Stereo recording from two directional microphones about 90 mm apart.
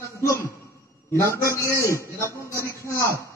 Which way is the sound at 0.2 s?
35° left (ahead or behind).